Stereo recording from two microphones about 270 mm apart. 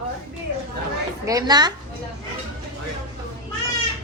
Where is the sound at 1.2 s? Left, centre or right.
Centre.